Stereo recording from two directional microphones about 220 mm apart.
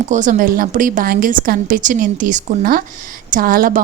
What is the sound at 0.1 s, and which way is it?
A woman's voice, 35° right (ahead or behind).